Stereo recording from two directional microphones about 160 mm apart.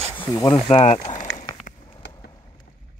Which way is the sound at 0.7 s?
40° left (ahead or behind).